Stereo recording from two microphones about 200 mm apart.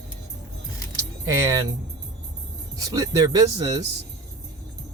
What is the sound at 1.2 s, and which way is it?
Speech, 15° right (ahead or behind).